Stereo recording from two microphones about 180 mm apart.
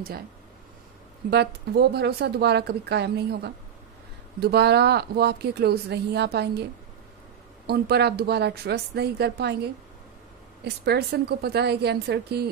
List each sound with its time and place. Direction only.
1.3 s speech: 65° right (ahead or behind)
7.6 s speech: 65° right (ahead or behind)